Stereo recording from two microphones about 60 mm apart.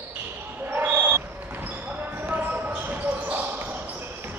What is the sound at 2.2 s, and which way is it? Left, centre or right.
Basketball bounce, right.